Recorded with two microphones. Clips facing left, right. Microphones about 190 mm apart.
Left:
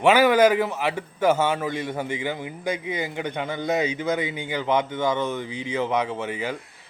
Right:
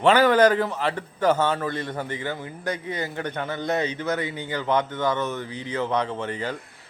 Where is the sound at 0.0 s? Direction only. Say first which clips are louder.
Even; 10° left (ahead or behind).